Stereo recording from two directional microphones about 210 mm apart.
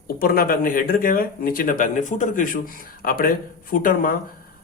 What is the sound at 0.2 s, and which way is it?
A man's voice, 45° left (ahead or behind).